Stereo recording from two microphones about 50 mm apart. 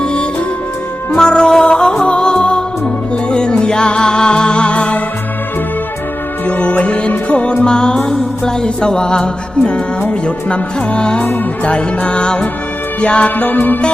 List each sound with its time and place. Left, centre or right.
0.0 s music: centre
6.6 s music: left
13.3 s music: left